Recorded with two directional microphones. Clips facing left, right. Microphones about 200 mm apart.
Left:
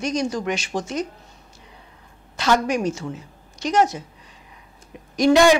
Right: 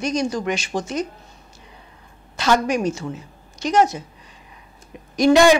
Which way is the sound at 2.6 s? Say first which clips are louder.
Right 1 dB; 15° right (ahead or behind).